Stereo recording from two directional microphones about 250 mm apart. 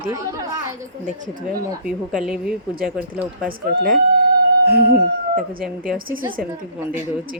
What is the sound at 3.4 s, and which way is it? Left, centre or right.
Speech, right.